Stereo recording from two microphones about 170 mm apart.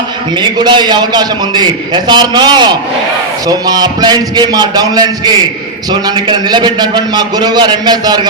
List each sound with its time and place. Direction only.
0.4 s a man's voice: 25° right (ahead or behind)